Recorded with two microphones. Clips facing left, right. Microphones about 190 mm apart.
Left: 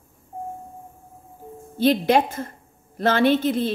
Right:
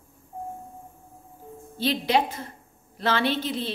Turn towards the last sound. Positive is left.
turn(degrees=50)  # may be behind; listen again after turning